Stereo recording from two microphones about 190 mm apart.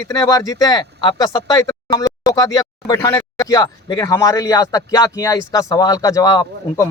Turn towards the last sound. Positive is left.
turn(degrees=20)  # may be behind; listen again after turning